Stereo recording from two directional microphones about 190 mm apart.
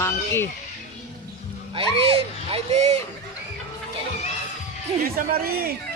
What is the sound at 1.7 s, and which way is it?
Speech, 30° right (ahead or behind).